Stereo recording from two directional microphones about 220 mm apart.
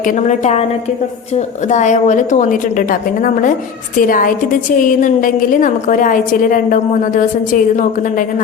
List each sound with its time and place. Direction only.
0.0 s a woman's voice: 35° left (ahead or behind)
1.7 s a woman's voice: 35° left (ahead or behind)